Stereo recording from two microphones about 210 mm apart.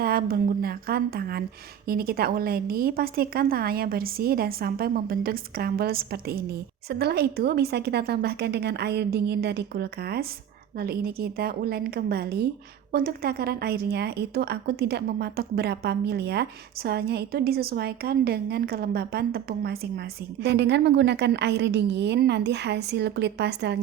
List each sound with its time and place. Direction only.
0.0 s a woman's voice: 45° right (ahead or behind)